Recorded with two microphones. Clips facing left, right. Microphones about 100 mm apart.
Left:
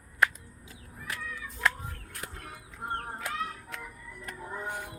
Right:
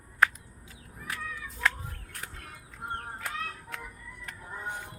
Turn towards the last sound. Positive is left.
turn(degrees=15)  # may be behind; listen again after turning